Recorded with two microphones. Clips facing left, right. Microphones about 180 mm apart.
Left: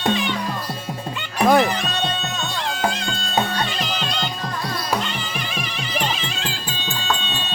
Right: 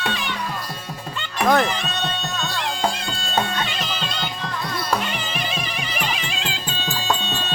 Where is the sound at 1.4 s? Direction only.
10° left (ahead or behind).